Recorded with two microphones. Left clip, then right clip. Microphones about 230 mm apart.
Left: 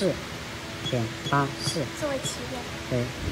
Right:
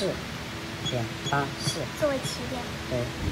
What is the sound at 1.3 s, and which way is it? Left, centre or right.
Speech, left.